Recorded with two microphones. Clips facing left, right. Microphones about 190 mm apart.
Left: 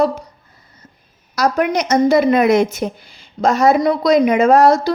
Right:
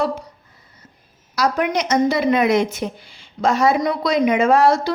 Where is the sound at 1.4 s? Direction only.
45° left (ahead or behind).